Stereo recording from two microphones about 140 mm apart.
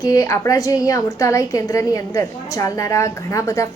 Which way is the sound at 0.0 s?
25° left (ahead or behind).